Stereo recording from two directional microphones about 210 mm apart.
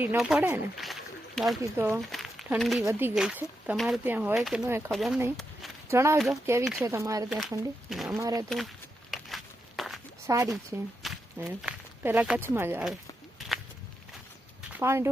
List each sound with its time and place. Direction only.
0.0 s speech: 5° right (ahead or behind)
1.6 s speech: 15° right (ahead or behind)
2.0 s speech: centre (ahead or behind)
5.9 s speech: 15° right (ahead or behind)
7.3 s speech: centre (ahead or behind)
8.1 s speech: 15° right (ahead or behind)
8.4 s walk: centre (ahead or behind)
10.2 s speech: 15° right (ahead or behind)
11.0 s walk: centre (ahead or behind)
11.4 s speech: 10° right (ahead or behind)
14.7 s speech: 10° right (ahead or behind)